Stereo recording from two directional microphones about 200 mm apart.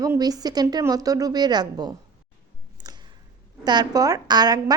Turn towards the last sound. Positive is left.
turn(degrees=-20)  # may be behind; listen again after turning